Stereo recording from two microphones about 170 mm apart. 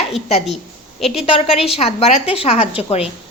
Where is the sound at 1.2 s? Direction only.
35° left (ahead or behind).